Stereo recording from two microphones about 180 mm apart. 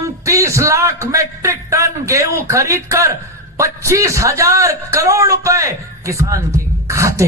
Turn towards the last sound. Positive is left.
turn(degrees=-15)  # may be behind; listen again after turning